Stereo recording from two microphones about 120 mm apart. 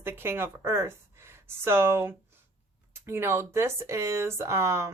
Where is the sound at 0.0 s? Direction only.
20° right (ahead or behind).